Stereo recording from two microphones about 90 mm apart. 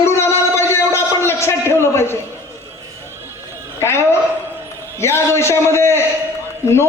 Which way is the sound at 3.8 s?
30° left (ahead or behind).